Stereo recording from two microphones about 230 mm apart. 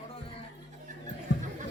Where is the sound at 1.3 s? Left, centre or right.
Left.